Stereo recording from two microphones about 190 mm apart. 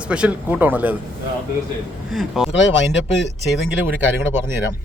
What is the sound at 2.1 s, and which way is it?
Speech, centre (ahead or behind).